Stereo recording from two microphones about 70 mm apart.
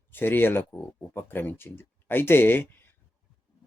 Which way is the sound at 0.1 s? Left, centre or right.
Left.